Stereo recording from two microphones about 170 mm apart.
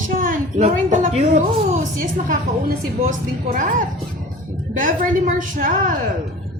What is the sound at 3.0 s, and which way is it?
Speech, 50° right (ahead or behind).